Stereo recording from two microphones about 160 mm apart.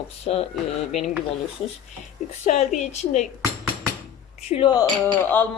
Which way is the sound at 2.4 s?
45° left (ahead or behind).